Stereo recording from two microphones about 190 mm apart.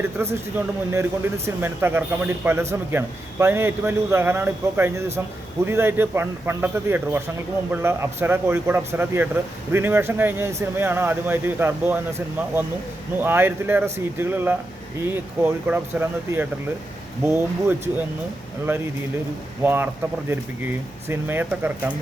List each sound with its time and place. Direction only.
0.2 s speech: 15° right (ahead or behind)
13.1 s speech: 10° right (ahead or behind)
19.6 s speech: 10° right (ahead or behind)
21.1 s speech: 10° right (ahead or behind)